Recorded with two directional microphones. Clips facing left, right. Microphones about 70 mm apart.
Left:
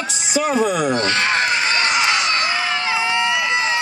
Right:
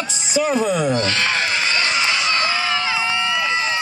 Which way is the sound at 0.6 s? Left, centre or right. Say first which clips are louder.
Left 1 dB; left.